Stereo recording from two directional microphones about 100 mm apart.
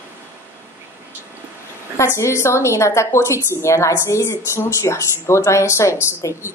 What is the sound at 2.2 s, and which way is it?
A woman's voice, 30° left (ahead or behind).